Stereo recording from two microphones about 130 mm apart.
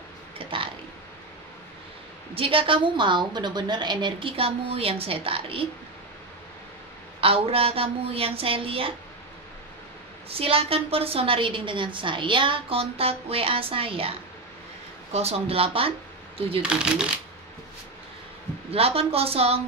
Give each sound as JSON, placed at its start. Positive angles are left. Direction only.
{"t": 0.4, "sound": "speech", "side_deg": -45}
{"t": 2.3, "sound": "a woman's voice", "side_deg": -45}
{"t": 7.2, "sound": "a woman's voice", "side_deg": -50}
{"t": 10.3, "sound": "a woman's voice", "side_deg": -50}
{"t": 15.1, "sound": "a woman's voice", "side_deg": -50}
{"t": 16.6, "sound": "speech", "side_deg": -5}
{"t": 18.7, "sound": "a woman's voice", "side_deg": -50}